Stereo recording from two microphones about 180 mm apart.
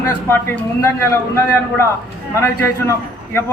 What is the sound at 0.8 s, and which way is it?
A man's voice, 15° left (ahead or behind).